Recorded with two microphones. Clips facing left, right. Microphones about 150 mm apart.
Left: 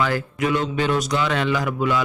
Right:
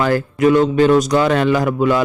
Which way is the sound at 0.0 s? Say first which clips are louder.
Right 8 dB; 45° right (ahead or behind).